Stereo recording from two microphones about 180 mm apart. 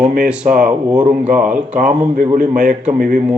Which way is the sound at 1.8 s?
50° right (ahead or behind).